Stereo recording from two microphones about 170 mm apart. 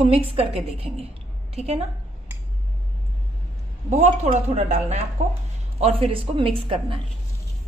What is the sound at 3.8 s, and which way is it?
A woman's voice, 40° right (ahead or behind).